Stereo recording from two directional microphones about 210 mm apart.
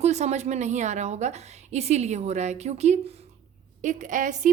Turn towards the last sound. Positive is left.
turn(degrees=-35)  # may be behind; listen again after turning